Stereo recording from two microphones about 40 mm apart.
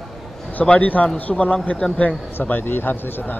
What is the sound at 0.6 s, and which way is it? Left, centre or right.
Speech, left.